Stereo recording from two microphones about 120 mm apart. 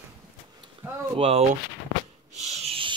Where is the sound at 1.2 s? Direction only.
55° right (ahead or behind).